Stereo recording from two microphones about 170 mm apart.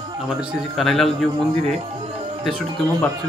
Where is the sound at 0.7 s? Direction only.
Centre (ahead or behind).